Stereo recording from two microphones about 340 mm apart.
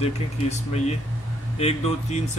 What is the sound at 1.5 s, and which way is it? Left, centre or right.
Speech, centre.